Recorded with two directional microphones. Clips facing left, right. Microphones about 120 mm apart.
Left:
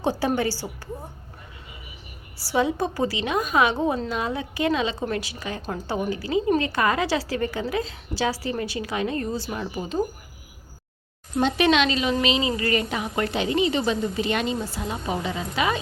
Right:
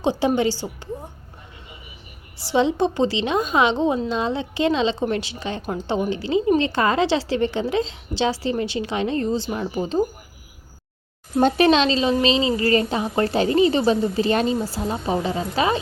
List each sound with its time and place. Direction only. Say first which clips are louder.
0.0 s a woman's voice: right 4 dB; 15° right (ahead or behind)
2.4 s a woman's voice: right 4 dB; 25° right (ahead or behind)
11.3 s a woman's voice: right 4 dB; 40° right (ahead or behind)